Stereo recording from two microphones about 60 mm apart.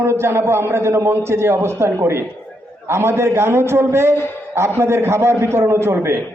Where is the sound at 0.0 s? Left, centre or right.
Right.